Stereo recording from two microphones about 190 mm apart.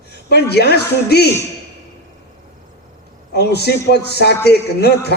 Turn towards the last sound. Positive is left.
turn(degrees=60)  # may be behind; listen again after turning